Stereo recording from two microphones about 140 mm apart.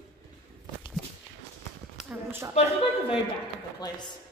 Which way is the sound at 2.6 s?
50° left (ahead or behind).